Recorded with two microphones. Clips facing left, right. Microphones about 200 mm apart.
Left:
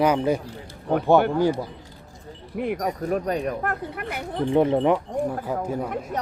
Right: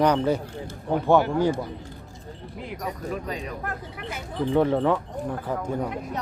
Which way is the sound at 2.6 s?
55° left (ahead or behind).